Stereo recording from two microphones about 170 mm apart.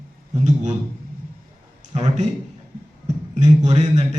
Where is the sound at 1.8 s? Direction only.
40° right (ahead or behind).